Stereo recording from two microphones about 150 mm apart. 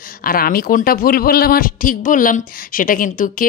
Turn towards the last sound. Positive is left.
turn(degrees=65)  # may be behind; listen again after turning